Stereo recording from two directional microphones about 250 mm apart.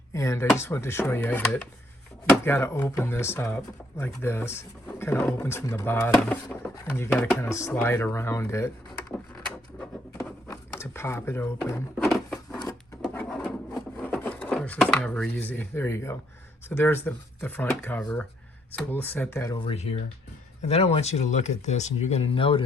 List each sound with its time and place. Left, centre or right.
0.1 s speech: centre
10.5 s speech: centre
12.1 s a sound: centre
13.1 s rub: centre
16.6 s speech: centre